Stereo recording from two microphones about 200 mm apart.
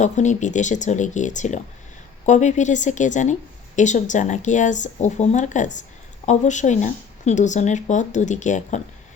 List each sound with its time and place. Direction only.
0.0 s speech: 35° left (ahead or behind)